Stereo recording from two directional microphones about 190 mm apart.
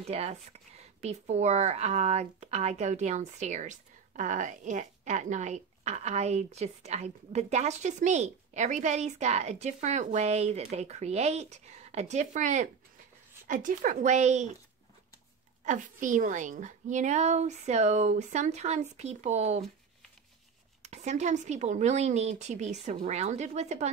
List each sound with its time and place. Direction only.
0.0 s speech: 35° right (ahead or behind)
15.6 s speech: 40° right (ahead or behind)
20.8 s speech: 35° right (ahead or behind)